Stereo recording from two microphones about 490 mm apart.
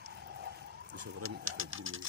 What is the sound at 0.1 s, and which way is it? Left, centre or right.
Bird, centre.